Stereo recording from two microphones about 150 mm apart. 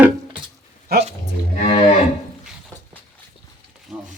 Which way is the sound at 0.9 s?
90° right.